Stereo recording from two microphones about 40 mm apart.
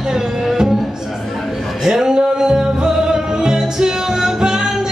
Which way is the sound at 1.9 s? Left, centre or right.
Centre.